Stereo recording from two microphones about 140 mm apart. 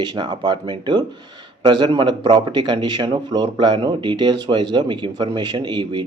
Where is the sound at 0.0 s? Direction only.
35° right (ahead or behind).